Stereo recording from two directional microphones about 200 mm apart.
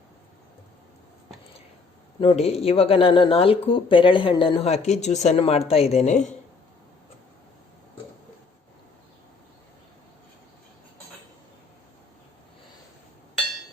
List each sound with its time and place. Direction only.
2.2 s speech: 30° left (ahead or behind)